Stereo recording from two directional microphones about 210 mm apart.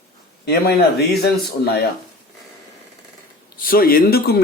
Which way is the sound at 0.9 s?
50° left (ahead or behind).